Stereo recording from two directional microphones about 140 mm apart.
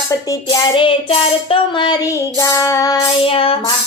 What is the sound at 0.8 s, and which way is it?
Hands, 40° left (ahead or behind).